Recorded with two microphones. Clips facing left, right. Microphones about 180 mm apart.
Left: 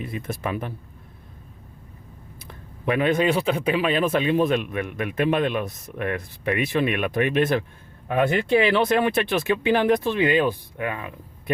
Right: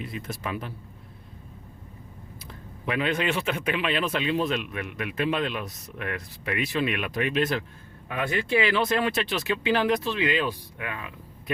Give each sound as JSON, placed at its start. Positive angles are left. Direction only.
{"t": 0.0, "sound": "a man's voice", "side_deg": 50}
{"t": 2.8, "sound": "a man's voice", "side_deg": 50}